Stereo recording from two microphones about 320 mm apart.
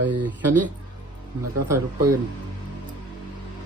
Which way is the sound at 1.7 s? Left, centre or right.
Centre.